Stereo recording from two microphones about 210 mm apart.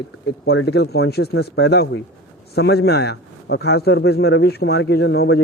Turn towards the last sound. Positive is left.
turn(degrees=50)  # may be behind; listen again after turning